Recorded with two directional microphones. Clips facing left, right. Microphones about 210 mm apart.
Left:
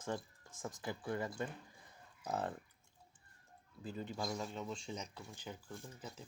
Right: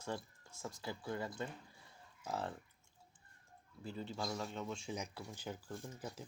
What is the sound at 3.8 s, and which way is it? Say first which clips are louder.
Speech: left 1 dB; 10° left (ahead or behind).